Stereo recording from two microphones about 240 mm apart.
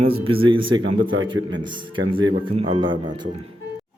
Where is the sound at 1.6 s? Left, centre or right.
Centre.